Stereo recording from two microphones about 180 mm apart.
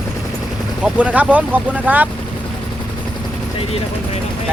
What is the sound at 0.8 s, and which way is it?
Speech, 5° right (ahead or behind).